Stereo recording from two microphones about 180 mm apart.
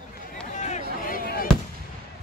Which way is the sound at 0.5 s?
40° left (ahead or behind).